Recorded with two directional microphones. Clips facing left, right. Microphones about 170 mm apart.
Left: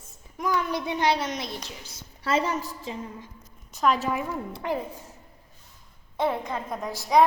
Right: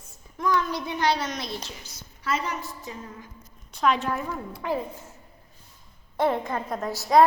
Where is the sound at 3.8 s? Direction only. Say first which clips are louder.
Even; centre (ahead or behind).